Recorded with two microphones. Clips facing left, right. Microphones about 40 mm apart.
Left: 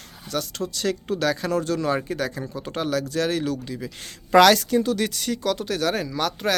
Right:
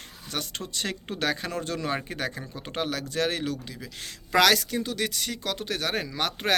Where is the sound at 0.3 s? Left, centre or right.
Right.